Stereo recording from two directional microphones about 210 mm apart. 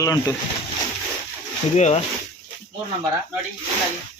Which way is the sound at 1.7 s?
35° left (ahead or behind).